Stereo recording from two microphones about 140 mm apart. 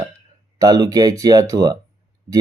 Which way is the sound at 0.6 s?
25° right (ahead or behind).